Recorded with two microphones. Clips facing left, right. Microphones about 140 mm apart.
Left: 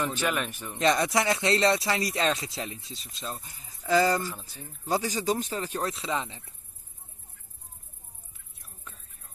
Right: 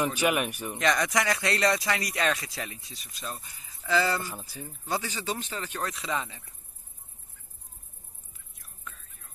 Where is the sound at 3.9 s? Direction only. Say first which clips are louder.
Left 3 dB; 40° left (ahead or behind).